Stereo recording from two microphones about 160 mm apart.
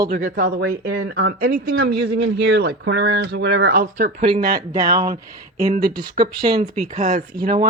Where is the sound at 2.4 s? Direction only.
80° right; by 4.6 s 65° right (ahead or behind).